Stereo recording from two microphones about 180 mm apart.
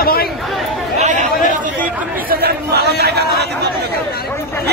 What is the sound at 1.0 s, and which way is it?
Chatter, 45° right (ahead or behind).